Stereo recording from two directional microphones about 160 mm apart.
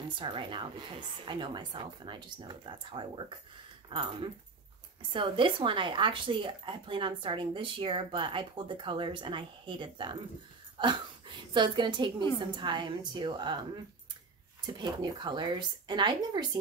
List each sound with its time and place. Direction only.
0.2 s speech: 30° right (ahead or behind)
14.8 s speech: 25° right (ahead or behind)